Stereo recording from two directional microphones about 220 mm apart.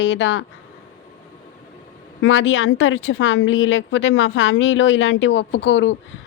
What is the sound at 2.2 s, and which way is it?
Speech, 60° left (ahead or behind).